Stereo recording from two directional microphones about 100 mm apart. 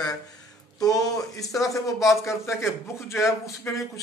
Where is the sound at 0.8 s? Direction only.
35° left (ahead or behind).